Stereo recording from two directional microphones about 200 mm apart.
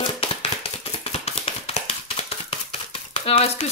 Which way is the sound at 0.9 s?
30° left (ahead or behind).